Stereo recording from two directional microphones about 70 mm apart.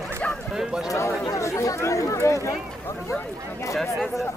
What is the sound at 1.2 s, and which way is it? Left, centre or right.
Chatter, left.